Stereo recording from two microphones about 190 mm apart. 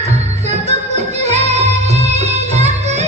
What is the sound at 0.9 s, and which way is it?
Music, 35° right (ahead or behind).